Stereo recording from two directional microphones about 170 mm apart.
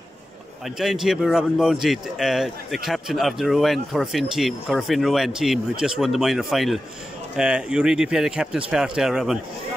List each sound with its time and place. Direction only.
0.7 s speech: centre (ahead or behind)